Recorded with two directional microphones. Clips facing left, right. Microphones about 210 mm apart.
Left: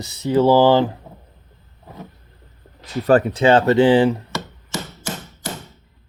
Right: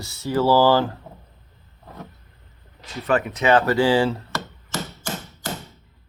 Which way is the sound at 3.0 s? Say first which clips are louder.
Left 5 dB; 35° left (ahead or behind).